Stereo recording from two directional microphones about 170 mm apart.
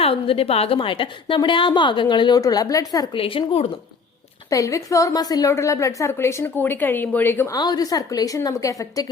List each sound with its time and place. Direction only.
0.0 s a woman's voice: 35° left (ahead or behind)
4.4 s a woman's voice: 20° left (ahead or behind)
7.6 s a woman's voice: 25° left (ahead or behind)